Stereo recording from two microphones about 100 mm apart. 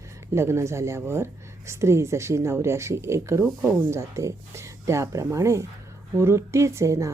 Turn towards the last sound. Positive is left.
turn(degrees=-30)  # may be behind; listen again after turning